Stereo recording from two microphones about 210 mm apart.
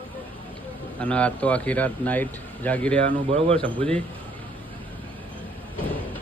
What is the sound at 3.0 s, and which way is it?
Speech, 40° right (ahead or behind).